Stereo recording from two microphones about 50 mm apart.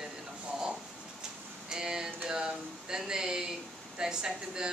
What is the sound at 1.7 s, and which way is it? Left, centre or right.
Speech, centre.